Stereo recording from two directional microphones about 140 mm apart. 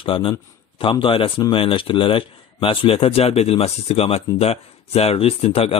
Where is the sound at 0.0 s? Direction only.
40° left (ahead or behind).